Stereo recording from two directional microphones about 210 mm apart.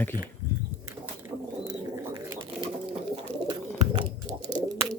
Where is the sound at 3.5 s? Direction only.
25° right (ahead or behind).